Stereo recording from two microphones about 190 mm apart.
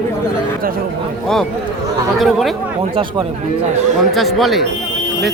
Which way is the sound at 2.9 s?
25° right (ahead or behind).